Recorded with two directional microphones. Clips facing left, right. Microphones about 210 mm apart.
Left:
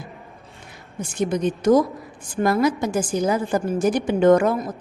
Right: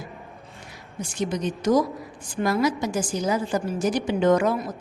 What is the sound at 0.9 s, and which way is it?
A woman's voice, 55° left (ahead or behind).